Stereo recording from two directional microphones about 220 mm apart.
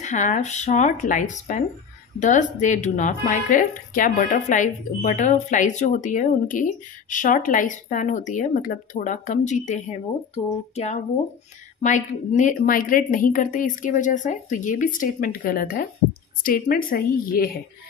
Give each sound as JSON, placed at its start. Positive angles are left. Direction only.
{"t": 0.0, "sound": "speech", "side_deg": 35}